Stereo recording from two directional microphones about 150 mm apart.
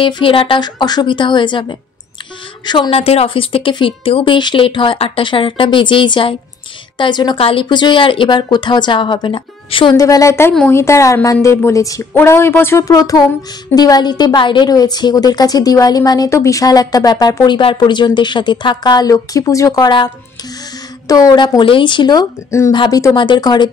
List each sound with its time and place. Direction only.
0.0 s a woman's voice: 35° left (ahead or behind)
9.9 s a woman's voice: 25° left (ahead or behind)
21.1 s a woman's voice: 25° left (ahead or behind)